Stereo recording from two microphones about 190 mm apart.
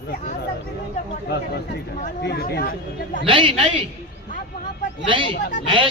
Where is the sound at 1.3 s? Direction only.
55° left (ahead or behind).